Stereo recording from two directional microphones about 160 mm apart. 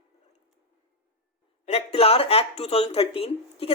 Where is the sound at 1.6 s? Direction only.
40° left (ahead or behind).